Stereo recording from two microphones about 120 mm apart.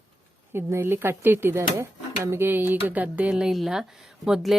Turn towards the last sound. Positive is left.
turn(degrees=-5)  # may be behind; listen again after turning